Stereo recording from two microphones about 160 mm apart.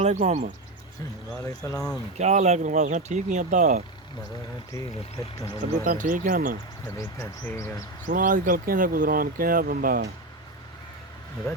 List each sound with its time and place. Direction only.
0.0 s speech: 50° right (ahead or behind)
1.4 s speech: 20° left (ahead or behind)
1.7 s speech: 5° left (ahead or behind)
2.1 s speech: 45° right (ahead or behind)
5.8 s speech: 55° right (ahead or behind)
6.9 s speech: 15° left (ahead or behind)
8.0 s speech: 55° right (ahead or behind)